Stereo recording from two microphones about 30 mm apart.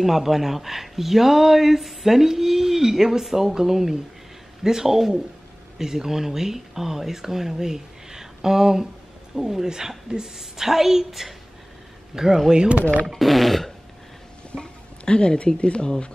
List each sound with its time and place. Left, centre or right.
0.0 s speech: centre
12.1 s speech: centre
13.0 s speech: centre
14.6 s speech: left